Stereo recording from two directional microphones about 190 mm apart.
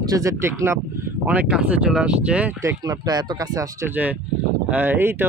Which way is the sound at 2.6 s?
20° right (ahead or behind).